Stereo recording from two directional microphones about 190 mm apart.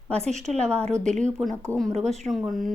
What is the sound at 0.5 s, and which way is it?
Speech, 5° left (ahead or behind).